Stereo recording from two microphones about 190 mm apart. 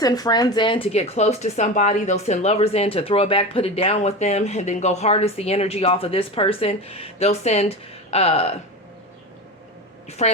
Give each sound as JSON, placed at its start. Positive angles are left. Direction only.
{"t": 0.0, "sound": "speech", "side_deg": 20}
{"t": 10.1, "sound": "speech", "side_deg": 35}